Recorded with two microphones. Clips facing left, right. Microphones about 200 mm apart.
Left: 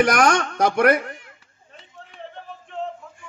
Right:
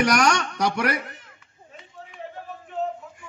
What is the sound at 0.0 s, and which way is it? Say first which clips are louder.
Speech: left 3 dB; 50° left (ahead or behind).